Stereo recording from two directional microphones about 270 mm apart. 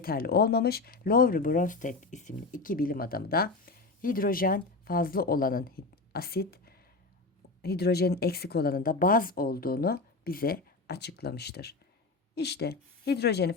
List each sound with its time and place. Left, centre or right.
0.0 s speech: left